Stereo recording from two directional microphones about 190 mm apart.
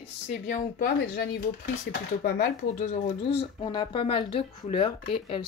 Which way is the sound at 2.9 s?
35° left (ahead or behind).